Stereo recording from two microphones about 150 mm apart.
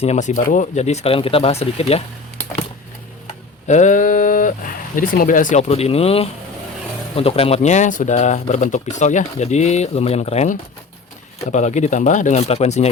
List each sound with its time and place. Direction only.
0.0 s speech: 50° left (ahead or behind)
3.7 s speech: 55° left (ahead or behind)